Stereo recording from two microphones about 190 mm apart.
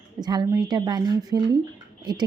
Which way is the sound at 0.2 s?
20° right (ahead or behind).